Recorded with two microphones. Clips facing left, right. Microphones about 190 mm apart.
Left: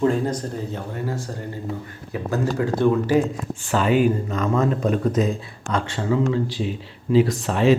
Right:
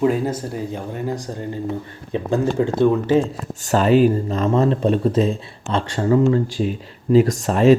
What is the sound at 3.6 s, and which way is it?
Speech, 40° right (ahead or behind).